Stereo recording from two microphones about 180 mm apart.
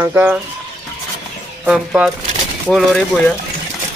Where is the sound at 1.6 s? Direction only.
5° right (ahead or behind).